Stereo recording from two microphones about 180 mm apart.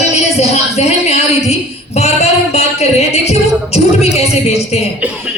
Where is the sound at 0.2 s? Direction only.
35° left (ahead or behind).